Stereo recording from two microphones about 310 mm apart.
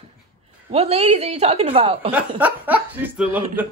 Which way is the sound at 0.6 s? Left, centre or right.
Centre.